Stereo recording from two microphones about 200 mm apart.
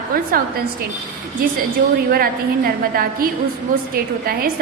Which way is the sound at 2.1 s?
45° right (ahead or behind).